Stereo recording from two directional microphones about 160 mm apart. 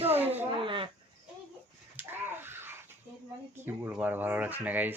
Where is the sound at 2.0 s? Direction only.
15° right (ahead or behind).